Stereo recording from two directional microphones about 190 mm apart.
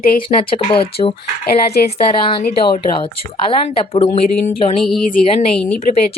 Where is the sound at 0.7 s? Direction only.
30° left (ahead or behind).